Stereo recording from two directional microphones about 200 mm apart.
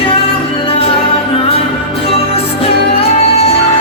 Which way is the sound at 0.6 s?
30° left (ahead or behind).